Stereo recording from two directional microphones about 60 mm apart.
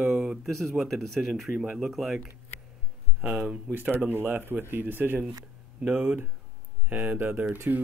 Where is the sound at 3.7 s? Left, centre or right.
Right.